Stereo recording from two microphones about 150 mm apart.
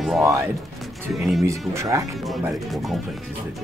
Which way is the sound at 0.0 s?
Centre (ahead or behind).